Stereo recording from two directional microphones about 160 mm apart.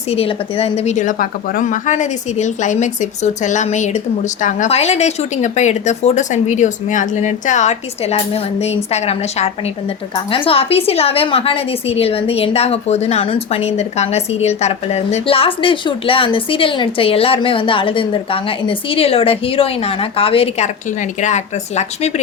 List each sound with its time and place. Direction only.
0.1 s a woman's voice: 35° left (ahead or behind)
21.2 s speech: 50° left (ahead or behind)